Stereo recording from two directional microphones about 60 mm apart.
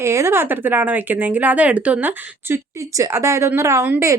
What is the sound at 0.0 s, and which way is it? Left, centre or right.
Speech, right.